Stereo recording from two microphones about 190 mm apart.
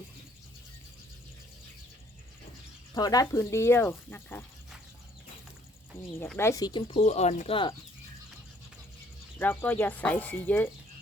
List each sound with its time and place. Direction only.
2.9 s speech: 20° left (ahead or behind)
6.1 s speech: 10° left (ahead or behind)
9.4 s speech: 10° left (ahead or behind)